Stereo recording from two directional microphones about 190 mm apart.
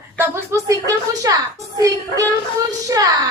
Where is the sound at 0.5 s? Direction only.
15° right (ahead or behind).